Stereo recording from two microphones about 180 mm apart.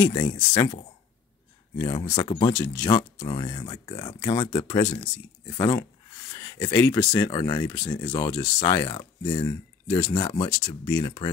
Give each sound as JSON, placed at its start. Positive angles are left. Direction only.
{"t": 0.0, "sound": "speech", "side_deg": 15}
{"t": 1.8, "sound": "speech", "side_deg": 20}